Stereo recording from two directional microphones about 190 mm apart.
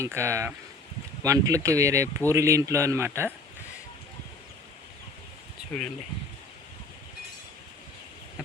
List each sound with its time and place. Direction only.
0.0 s speech: 15° right (ahead or behind)